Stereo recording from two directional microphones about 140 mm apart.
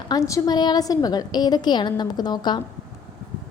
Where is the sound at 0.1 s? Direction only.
20° left (ahead or behind).